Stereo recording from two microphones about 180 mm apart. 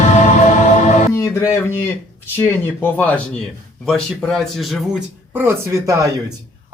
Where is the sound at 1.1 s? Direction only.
15° left (ahead or behind); by 5.0 s centre (ahead or behind).